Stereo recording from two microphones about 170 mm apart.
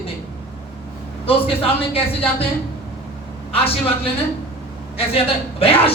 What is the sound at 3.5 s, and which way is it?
Speech, 35° left (ahead or behind).